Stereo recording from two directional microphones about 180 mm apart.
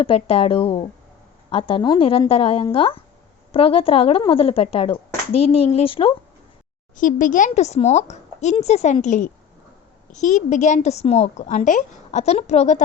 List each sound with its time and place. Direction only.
0.0 s a woman's voice: 30° left (ahead or behind)
6.9 s a woman's voice: 45° left (ahead or behind)